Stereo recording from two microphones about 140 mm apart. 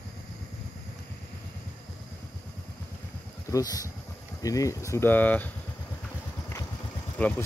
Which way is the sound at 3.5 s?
25° left (ahead or behind).